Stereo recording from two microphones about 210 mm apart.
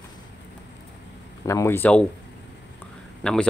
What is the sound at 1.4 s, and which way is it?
Speech, 15° left (ahead or behind).